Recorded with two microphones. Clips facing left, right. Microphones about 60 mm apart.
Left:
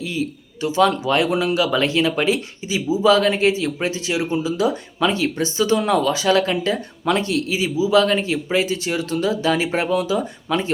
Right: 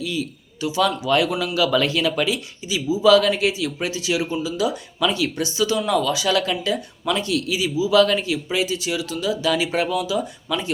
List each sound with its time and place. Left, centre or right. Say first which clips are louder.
0.0 s speech: left 2 dB; left
2.2 s speech: left 4 dB; left